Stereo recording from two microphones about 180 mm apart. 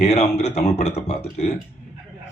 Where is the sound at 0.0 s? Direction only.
40° left (ahead or behind).